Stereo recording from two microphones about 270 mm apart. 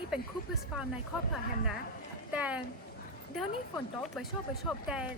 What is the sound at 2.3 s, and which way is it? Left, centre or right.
Speech, centre.